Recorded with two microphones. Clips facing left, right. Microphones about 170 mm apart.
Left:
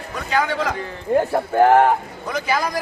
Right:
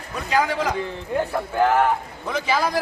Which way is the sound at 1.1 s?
45° left (ahead or behind).